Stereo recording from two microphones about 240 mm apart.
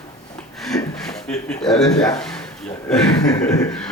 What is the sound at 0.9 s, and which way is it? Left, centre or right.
Speech, centre.